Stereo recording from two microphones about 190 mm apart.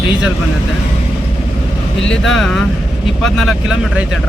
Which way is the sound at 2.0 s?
Centre (ahead or behind).